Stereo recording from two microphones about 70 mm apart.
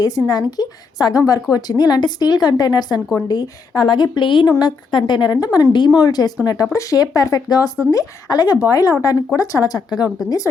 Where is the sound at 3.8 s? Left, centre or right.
Left.